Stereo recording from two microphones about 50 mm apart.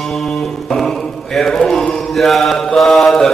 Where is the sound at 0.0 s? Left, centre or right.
Centre.